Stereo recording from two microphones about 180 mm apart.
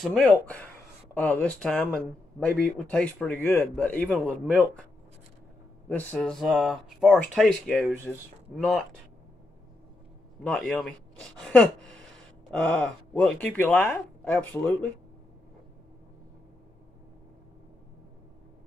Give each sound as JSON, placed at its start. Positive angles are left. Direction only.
{"t": 0.0, "sound": "speech", "side_deg": 0}
{"t": 5.9, "sound": "speech", "side_deg": 10}
{"t": 10.7, "sound": "speech", "side_deg": 5}